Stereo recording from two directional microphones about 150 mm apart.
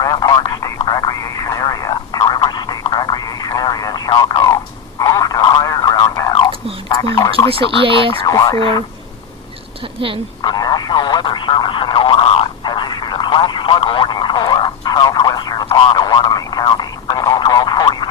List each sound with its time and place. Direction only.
0.0 s speech: 25° left (ahead or behind)
0.8 s telephone: 25° left (ahead or behind)
6.8 s frog: 25° left (ahead or behind)
7.5 s speech: 35° right (ahead or behind)
8.2 s speech: 25° left (ahead or behind)
9.8 s speech: 35° right (ahead or behind)
10.4 s a sound: 25° left (ahead or behind)